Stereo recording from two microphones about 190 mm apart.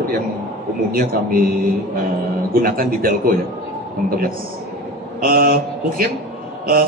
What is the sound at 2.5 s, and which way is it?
Speech, 50° right (ahead or behind).